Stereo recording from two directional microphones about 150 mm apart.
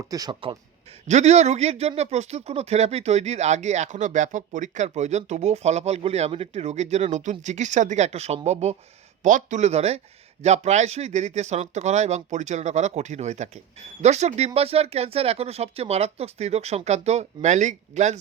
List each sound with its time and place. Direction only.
0.1 s speech: 25° right (ahead or behind)
1.0 s speech: 50° right (ahead or behind)
9.2 s speech: 55° right (ahead or behind)